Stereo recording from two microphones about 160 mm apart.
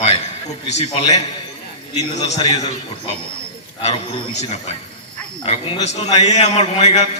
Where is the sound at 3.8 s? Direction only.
35° left (ahead or behind).